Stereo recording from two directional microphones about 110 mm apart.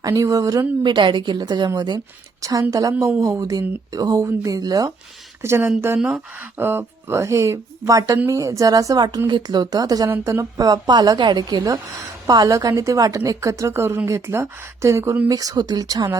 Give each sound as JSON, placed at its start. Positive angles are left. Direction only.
{"t": 0.0, "sound": "a woman's voice", "side_deg": -30}
{"t": 0.8, "sound": "a woman's voice", "side_deg": -45}
{"t": 5.4, "sound": "a woman's voice", "side_deg": -25}